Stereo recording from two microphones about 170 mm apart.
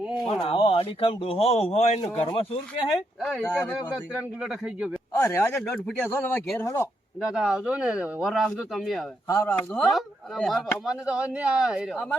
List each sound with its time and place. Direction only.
0.3 s speech: 30° left (ahead or behind)
3.2 s speech: centre (ahead or behind)
3.4 s speech: 10° left (ahead or behind)
4.4 s speech: 5° right (ahead or behind)
5.1 s speech: 15° left (ahead or behind)
7.3 s speech: 5° right (ahead or behind)
9.2 s speech: 10° left (ahead or behind); by 11.9 s 5° right (ahead or behind)